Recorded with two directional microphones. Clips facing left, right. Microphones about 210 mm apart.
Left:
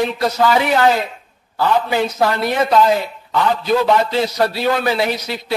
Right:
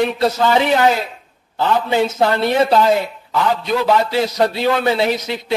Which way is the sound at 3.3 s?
Centre (ahead or behind).